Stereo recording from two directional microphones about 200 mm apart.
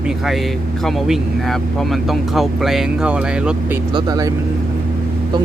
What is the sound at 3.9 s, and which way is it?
Speech, 20° right (ahead or behind).